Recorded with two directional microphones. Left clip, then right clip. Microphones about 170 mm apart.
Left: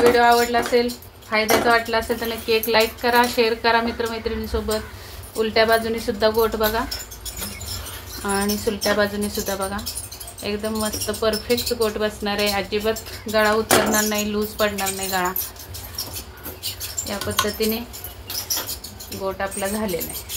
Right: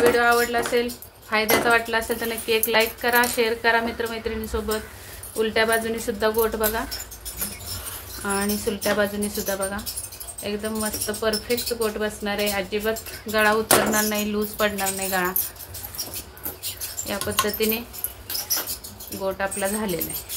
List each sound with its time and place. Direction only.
0.0 s speech: 15° right (ahead or behind)
8.2 s speech: 5° right (ahead or behind)
13.3 s speech: 15° right (ahead or behind)
17.1 s speech: 20° right (ahead or behind)
19.2 s speech: 25° right (ahead or behind)